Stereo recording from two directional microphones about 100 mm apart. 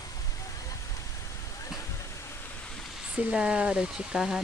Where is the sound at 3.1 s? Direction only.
10° right (ahead or behind).